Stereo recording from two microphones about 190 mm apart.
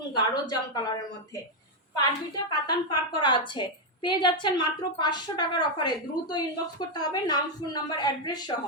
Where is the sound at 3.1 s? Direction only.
25° left (ahead or behind).